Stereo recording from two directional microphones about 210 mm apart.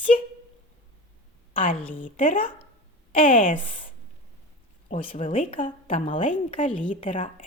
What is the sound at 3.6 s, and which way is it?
Speech, 25° left (ahead or behind).